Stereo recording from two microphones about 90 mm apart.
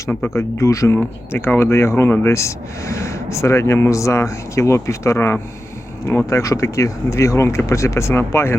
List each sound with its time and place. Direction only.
0.3 s speech: 35° left (ahead or behind)
0.9 s speech: 25° left (ahead or behind)